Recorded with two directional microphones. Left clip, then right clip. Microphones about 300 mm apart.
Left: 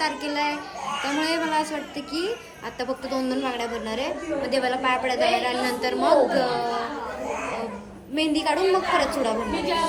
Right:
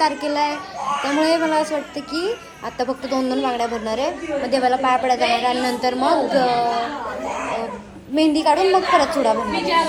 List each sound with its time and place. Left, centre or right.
0.0 s a woman's voice: centre
8.1 s a woman's voice: centre